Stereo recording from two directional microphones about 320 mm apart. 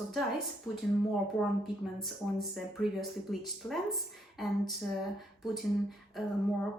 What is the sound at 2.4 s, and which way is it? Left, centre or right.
Speech, centre.